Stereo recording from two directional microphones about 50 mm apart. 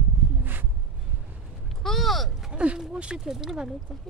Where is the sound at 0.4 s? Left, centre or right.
Right.